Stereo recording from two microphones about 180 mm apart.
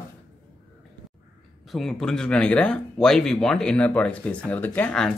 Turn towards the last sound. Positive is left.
turn(degrees=5)  # may be behind; listen again after turning